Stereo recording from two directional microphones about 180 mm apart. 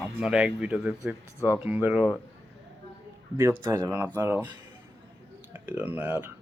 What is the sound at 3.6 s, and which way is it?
Speech, 20° right (ahead or behind).